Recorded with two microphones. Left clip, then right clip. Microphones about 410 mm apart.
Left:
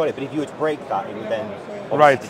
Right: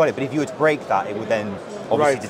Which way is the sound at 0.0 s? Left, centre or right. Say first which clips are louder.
Right 3 dB; right.